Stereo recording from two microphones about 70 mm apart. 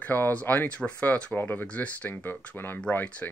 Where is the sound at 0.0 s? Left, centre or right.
Left.